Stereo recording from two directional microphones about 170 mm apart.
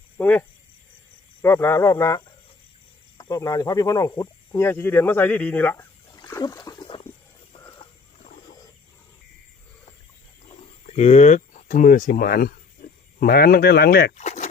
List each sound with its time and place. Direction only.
0.2 s speech: 10° left (ahead or behind)
6.1 s splash: 20° left (ahead or behind)
10.8 s speech: 40° left (ahead or behind); by 14.1 s 65° left (ahead or behind)
14.2 s a sound: 40° left (ahead or behind)